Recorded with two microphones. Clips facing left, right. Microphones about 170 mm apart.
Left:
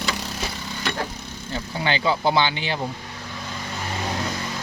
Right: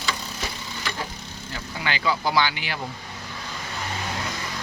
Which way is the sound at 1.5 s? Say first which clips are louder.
Left 5 dB; 30° left (ahead or behind).